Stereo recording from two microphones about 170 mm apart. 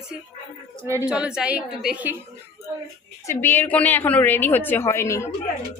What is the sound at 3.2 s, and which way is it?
Speech, 15° left (ahead or behind).